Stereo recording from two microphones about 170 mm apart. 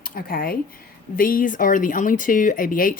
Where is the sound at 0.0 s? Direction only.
60° left (ahead or behind).